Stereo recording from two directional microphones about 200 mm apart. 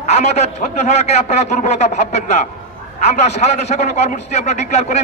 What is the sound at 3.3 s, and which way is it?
A man's voice, 35° left (ahead or behind).